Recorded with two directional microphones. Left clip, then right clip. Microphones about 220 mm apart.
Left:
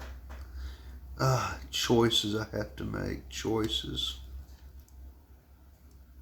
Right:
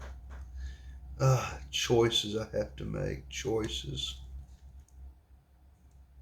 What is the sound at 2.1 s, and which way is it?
Speech, 45° left (ahead or behind).